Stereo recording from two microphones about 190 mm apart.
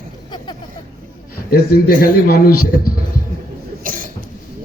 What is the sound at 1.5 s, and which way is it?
Speech, 55° left (ahead or behind).